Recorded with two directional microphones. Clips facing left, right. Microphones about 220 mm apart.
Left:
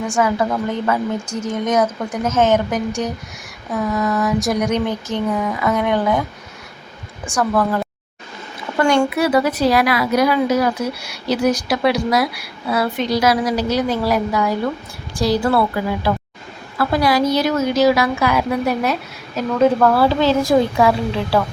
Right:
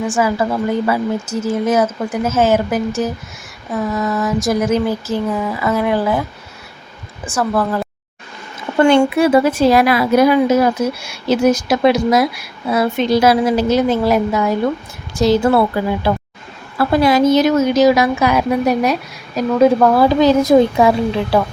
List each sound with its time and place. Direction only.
0.1 s speech: 5° right (ahead or behind)
7.3 s speech: 5° right (ahead or behind)
8.8 s a woman's voice: 25° right (ahead or behind)
16.7 s a woman's voice: 25° right (ahead or behind)